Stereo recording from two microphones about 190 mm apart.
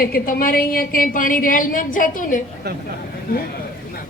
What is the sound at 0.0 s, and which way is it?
A woman's voice, 50° left (ahead or behind).